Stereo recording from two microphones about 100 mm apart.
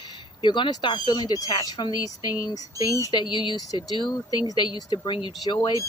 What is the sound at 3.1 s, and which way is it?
Speech, 50° left (ahead or behind).